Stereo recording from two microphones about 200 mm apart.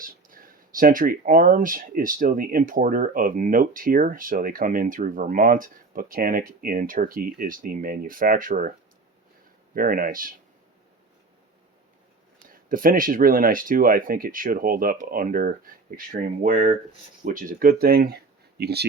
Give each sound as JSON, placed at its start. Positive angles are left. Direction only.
{"t": 0.0, "sound": "speech", "side_deg": -45}
{"t": 9.7, "sound": "speech", "side_deg": -45}
{"t": 12.5, "sound": "speech", "side_deg": -45}